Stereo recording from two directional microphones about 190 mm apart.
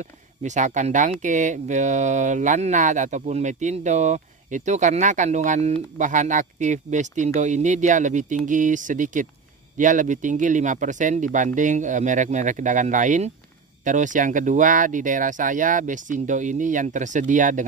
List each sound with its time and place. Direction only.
0.0 s speech: 40° right (ahead or behind)